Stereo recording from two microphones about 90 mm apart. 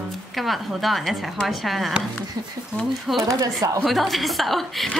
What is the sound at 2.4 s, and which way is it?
Speech, 45° right (ahead or behind).